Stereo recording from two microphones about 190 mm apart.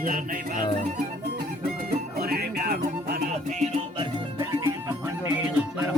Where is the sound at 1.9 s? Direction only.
55° right (ahead or behind).